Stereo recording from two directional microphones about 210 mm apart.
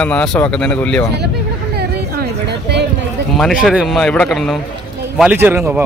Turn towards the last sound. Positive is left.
turn(degrees=-10)  # may be behind; listen again after turning